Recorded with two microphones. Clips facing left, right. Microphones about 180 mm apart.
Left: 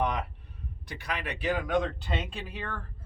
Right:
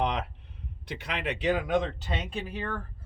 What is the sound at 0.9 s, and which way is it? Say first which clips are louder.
Speech: right 3 dB; 25° right (ahead or behind).